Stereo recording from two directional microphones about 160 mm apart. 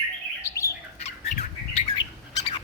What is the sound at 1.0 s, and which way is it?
Bird, 40° left (ahead or behind).